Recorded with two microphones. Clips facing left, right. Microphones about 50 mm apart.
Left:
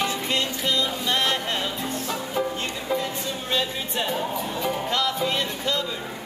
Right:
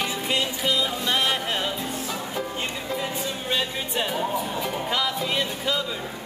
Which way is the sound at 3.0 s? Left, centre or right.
Centre.